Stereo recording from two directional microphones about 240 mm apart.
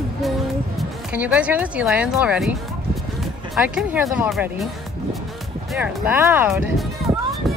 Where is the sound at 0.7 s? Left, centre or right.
Centre.